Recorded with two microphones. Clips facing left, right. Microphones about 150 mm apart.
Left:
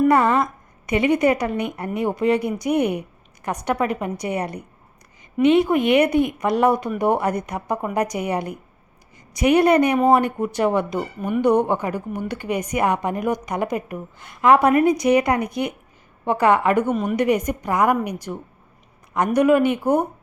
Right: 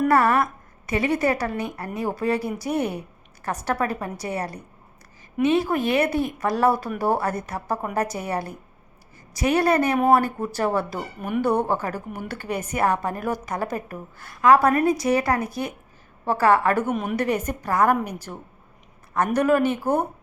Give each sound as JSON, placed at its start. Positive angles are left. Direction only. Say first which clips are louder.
{"t": 0.1, "sound": "a woman's voice", "louder": "left 2 dB", "side_deg": 20}
{"t": 11.2, "sound": "a woman's voice", "louder": "left 1 dB", "side_deg": -5}
{"t": 11.4, "sound": "a woman's voice", "louder": "left 5 dB", "side_deg": 15}
{"t": 16.8, "sound": "a woman's voice", "louder": "left 3 dB", "side_deg": -5}
{"t": 17.2, "sound": "a woman's voice", "louder": "left 4 dB", "side_deg": 15}